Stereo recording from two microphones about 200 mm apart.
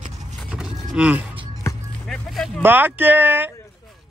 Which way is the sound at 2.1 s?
Centre (ahead or behind).